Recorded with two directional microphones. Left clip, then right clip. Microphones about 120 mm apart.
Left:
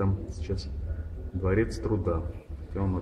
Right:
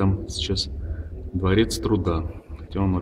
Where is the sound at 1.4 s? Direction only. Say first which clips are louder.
Right 6 dB; 40° right (ahead or behind).